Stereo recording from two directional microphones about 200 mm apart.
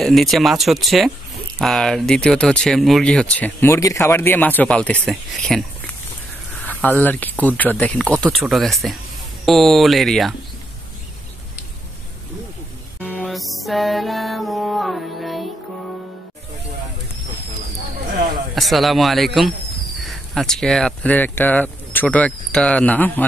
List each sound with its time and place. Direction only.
0.0 s speech: centre (ahead or behind)
6.5 s a sound: 10° left (ahead or behind)
7.4 s speech: 10° left (ahead or behind)
13.1 s music: centre (ahead or behind)
18.1 s a sound: 45° right (ahead or behind)
18.5 s speech: centre (ahead or behind)